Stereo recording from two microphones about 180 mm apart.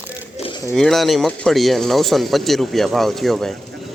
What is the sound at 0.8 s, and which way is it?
Speech, centre (ahead or behind).